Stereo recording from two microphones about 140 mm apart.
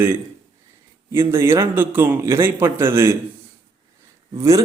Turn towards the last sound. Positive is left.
turn(degrees=-25)  # may be behind; listen again after turning